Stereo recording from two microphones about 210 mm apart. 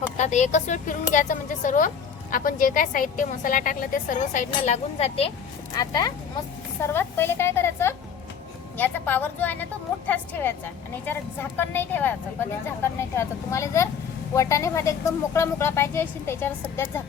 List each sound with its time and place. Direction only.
0.2 s a woman's voice: 35° left (ahead or behind)
5.7 s a woman's voice: 20° left (ahead or behind)
11.0 s a woman's voice: 10° left (ahead or behind)